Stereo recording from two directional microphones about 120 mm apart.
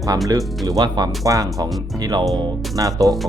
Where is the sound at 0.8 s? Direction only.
35° right (ahead or behind).